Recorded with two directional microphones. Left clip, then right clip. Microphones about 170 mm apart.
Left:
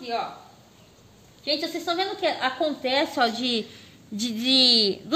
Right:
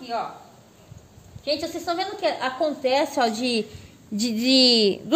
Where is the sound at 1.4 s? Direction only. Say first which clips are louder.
Right 1 dB; 20° right (ahead or behind).